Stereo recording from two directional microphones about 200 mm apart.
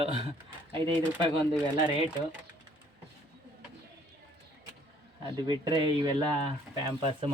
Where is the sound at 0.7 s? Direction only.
25° right (ahead or behind).